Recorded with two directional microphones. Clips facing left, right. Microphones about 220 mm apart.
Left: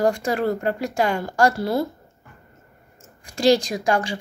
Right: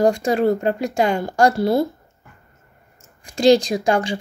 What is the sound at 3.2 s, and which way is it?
Speech, 20° right (ahead or behind).